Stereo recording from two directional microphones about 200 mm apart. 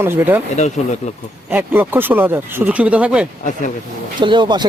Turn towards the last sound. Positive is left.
turn(degrees=-20)  # may be behind; listen again after turning